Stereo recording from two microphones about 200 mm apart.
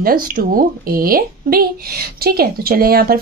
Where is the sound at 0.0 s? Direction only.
45° right (ahead or behind).